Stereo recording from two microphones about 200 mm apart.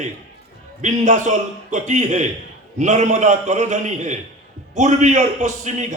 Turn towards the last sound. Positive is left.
turn(degrees=-35)  # may be behind; listen again after turning